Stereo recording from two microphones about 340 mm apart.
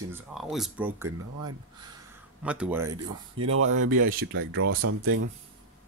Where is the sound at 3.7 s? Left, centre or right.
Right.